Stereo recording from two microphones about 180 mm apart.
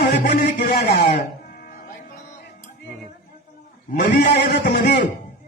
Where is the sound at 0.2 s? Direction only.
50° left (ahead or behind).